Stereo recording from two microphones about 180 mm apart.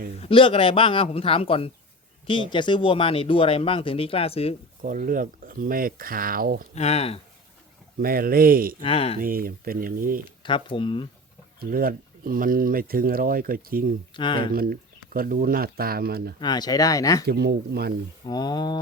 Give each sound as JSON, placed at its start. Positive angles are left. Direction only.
{"t": 0.2, "sound": "speech", "side_deg": 30}
{"t": 4.8, "sound": "speech", "side_deg": -50}
{"t": 6.7, "sound": "speech", "side_deg": 35}
{"t": 8.0, "sound": "speech", "side_deg": -55}
{"t": 8.8, "sound": "speech", "side_deg": 30}
{"t": 9.2, "sound": "speech", "side_deg": -55}
{"t": 10.4, "sound": "speech", "side_deg": 25}
{"t": 11.6, "sound": "speech", "side_deg": -55}
{"t": 14.1, "sound": "speech", "side_deg": 25}
{"t": 14.5, "sound": "speech", "side_deg": -55}
{"t": 16.4, "sound": "speech", "side_deg": 20}
{"t": 17.2, "sound": "speech", "side_deg": -65}
{"t": 18.3, "sound": "speech", "side_deg": 20}